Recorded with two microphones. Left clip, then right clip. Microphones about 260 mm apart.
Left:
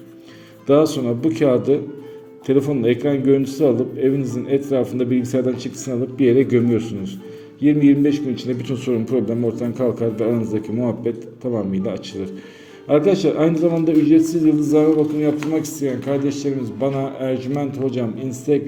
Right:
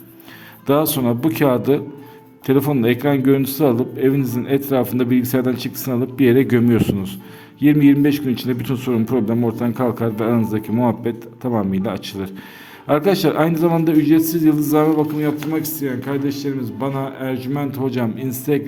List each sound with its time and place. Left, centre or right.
0.7 s a man's voice: right